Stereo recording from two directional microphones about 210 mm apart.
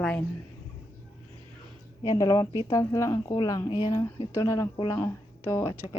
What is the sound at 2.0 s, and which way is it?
Speech, 15° left (ahead or behind).